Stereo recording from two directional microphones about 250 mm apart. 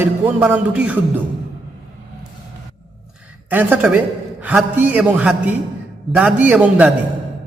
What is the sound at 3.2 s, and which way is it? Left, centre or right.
A man's voice, centre.